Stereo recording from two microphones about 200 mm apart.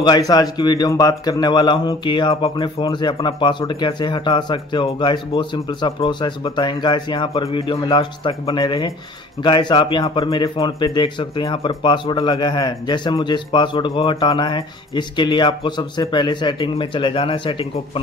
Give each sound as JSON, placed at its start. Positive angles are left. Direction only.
{"t": 0.3, "sound": "speech", "side_deg": 20}